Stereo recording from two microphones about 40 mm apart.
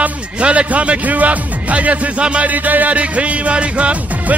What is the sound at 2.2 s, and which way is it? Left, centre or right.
Speech, right.